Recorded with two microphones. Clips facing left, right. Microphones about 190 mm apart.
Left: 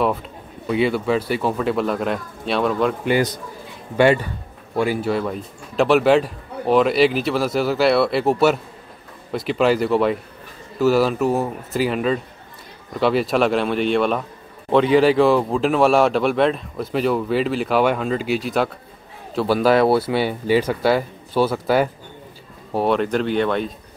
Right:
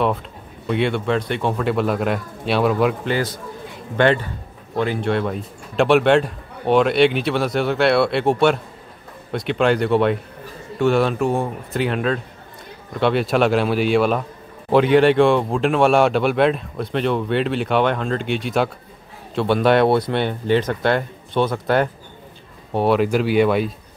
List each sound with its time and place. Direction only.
0.7 s speech: centre (ahead or behind)
3.1 s a man's voice: 15° left (ahead or behind); by 23.7 s 10° right (ahead or behind)